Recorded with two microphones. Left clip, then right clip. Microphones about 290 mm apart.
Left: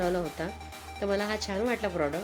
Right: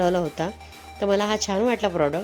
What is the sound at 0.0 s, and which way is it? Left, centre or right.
Speech, right.